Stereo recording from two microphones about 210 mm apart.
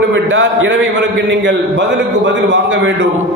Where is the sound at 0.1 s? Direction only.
65° right (ahead or behind).